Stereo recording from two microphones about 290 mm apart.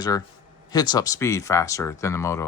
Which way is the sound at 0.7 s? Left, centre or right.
Centre.